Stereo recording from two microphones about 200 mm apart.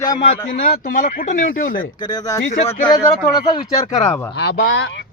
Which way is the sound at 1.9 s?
20° left (ahead or behind).